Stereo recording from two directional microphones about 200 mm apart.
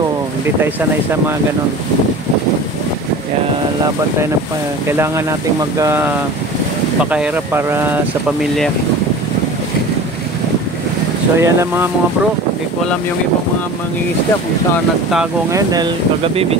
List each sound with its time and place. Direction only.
4.8 s speech: 10° right (ahead or behind)
11.4 s speech: 10° right (ahead or behind)
15.5 s speech: 20° right (ahead or behind)